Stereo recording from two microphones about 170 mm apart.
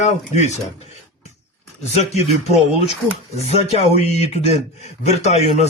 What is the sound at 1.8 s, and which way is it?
Speech, 40° left (ahead or behind).